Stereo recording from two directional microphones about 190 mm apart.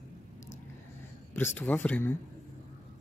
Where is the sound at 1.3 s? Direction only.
10° left (ahead or behind).